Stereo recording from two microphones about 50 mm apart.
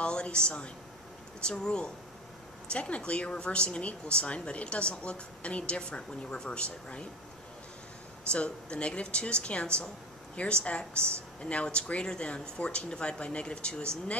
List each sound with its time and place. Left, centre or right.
0.0 s a woman's voice: centre
8.3 s a woman's voice: left